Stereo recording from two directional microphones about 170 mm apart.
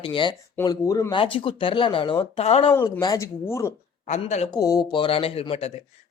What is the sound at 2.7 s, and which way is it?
Speech, 15° left (ahead or behind).